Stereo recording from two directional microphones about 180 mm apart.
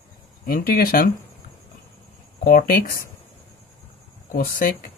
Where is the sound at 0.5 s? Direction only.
55° left (ahead or behind).